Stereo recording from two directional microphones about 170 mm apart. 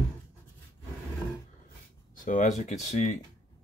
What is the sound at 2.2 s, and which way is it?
Speech, 45° left (ahead or behind).